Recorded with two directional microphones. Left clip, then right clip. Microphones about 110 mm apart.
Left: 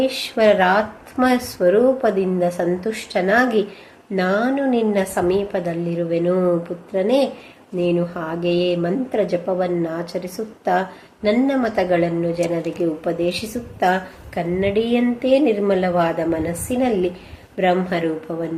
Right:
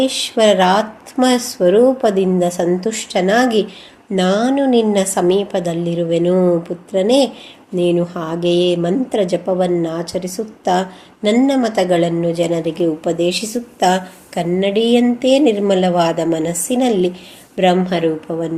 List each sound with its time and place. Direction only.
0.0 s speech: 40° right (ahead or behind)